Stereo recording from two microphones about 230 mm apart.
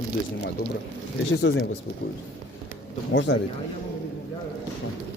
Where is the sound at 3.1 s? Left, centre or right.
Left.